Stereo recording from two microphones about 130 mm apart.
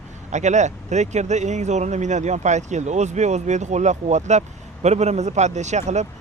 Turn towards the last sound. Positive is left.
turn(degrees=-65)  # may be behind; listen again after turning